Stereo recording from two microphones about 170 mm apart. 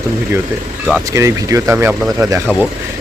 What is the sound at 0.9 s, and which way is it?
Speech, 15° right (ahead or behind).